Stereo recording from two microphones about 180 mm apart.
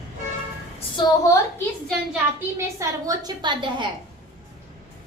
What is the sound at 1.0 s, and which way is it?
Speech, 25° left (ahead or behind).